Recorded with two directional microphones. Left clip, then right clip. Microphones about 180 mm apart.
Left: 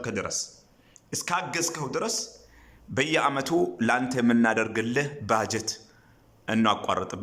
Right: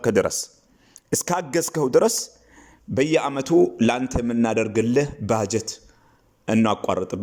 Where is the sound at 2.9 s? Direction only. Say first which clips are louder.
Right 3 dB; 25° right (ahead or behind).